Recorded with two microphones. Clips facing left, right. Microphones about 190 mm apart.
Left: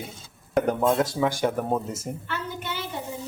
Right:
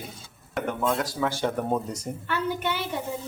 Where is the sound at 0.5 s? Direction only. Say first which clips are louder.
Left 6 dB; 40° left (ahead or behind).